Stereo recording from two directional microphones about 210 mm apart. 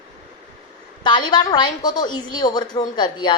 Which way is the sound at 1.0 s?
20° left (ahead or behind).